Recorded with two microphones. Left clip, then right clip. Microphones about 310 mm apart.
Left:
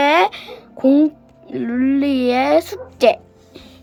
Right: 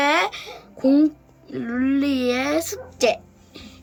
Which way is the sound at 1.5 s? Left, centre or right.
Centre.